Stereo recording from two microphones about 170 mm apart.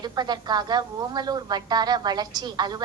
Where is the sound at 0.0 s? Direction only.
25° right (ahead or behind).